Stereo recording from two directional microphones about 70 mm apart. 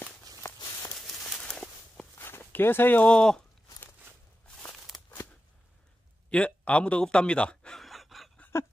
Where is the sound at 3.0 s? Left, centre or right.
Centre.